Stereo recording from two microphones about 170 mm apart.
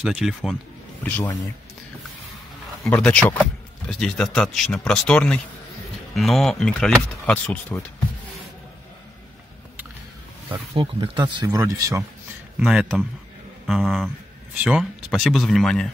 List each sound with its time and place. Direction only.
0.0 s speech: centre (ahead or behind)
1.0 s speech: 10° left (ahead or behind)
2.8 s speech: 5° left (ahead or behind)
10.5 s speech: 30° right (ahead or behind)
11.4 s speech: 15° right (ahead or behind)
12.5 s speech: 5° right (ahead or behind)